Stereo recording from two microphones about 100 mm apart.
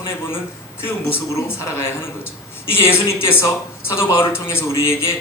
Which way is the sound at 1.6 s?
25° left (ahead or behind).